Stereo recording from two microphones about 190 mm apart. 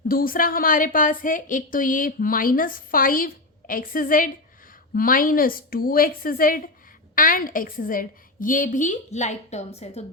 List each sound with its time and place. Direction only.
0.1 s a woman's voice: 50° left (ahead or behind); by 10.0 s 35° left (ahead or behind)